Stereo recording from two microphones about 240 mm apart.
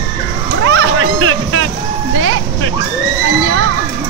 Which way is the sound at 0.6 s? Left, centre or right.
Right.